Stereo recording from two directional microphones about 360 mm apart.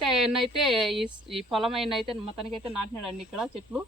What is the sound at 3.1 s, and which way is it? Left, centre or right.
Speech, centre.